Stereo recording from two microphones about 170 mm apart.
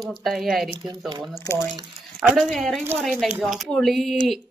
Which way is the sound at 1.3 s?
15° left (ahead or behind).